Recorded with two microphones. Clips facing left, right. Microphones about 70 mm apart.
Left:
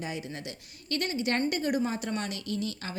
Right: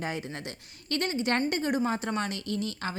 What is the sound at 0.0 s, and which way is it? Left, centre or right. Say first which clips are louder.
A woman's voice: right 2 dB; right.